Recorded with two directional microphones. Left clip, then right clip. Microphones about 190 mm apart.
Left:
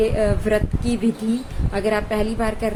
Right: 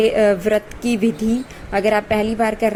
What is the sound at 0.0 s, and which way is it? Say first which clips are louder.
A woman's voice: right 5 dB; 25° right (ahead or behind).